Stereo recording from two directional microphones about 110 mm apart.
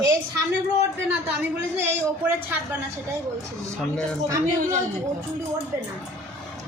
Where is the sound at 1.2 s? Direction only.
20° right (ahead or behind).